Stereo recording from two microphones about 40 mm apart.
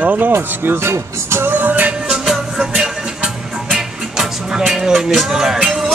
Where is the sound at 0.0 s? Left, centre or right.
Right.